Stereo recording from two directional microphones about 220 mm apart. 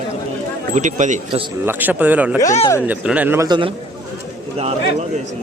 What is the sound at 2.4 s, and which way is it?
Speech, 30° left (ahead or behind).